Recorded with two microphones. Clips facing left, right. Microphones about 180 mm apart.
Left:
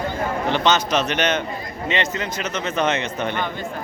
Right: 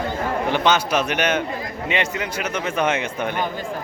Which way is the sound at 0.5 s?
10° right (ahead or behind).